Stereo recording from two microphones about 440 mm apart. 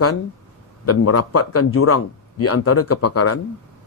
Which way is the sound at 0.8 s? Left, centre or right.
Left.